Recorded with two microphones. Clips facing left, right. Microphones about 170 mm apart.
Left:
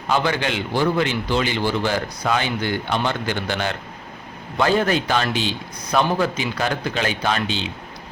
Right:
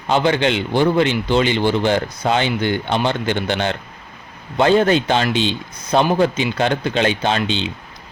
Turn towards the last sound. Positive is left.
turn(degrees=-25)  # may be behind; listen again after turning